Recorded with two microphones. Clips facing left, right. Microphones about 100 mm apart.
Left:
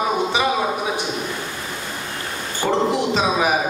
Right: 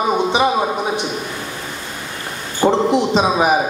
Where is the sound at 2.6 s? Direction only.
25° right (ahead or behind).